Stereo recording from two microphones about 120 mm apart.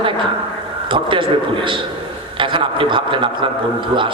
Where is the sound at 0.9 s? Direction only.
45° right (ahead or behind).